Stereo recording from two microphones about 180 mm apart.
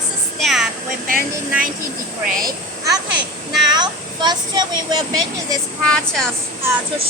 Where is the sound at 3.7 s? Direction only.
25° right (ahead or behind).